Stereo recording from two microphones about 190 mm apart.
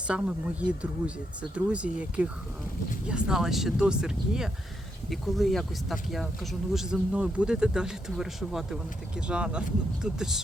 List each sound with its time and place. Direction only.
0.1 s speech: 5° right (ahead or behind)